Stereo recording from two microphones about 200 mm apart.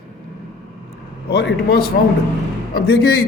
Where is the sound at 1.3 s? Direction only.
55° left (ahead or behind).